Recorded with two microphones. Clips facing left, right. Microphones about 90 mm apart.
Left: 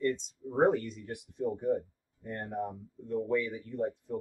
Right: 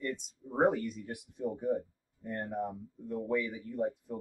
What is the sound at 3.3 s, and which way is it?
Speech, 15° right (ahead or behind).